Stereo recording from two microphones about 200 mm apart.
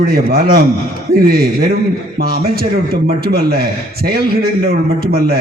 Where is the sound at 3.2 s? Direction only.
50° right (ahead or behind).